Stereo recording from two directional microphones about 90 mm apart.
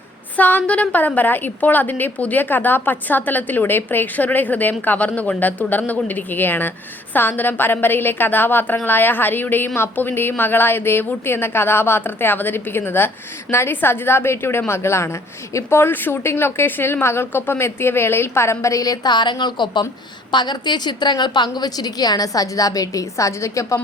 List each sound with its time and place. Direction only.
0.3 s a woman's voice: 20° left (ahead or behind); by 23.8 s 35° left (ahead or behind)